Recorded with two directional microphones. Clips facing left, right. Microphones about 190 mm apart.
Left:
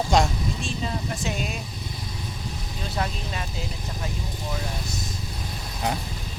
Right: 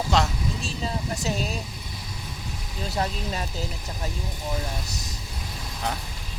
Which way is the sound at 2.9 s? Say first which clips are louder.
Right 2 dB; 35° right (ahead or behind).